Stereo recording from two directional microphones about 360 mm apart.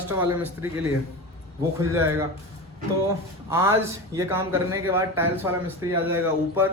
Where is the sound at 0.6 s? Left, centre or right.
Centre.